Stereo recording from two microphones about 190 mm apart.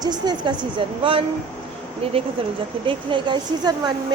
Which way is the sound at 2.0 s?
30° right (ahead or behind).